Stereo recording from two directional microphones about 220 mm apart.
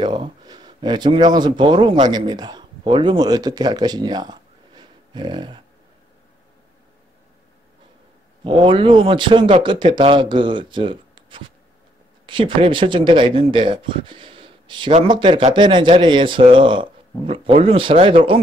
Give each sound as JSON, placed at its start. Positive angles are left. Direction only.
{"t": 0.0, "sound": "speech", "side_deg": -20}
{"t": 8.5, "sound": "speech", "side_deg": -20}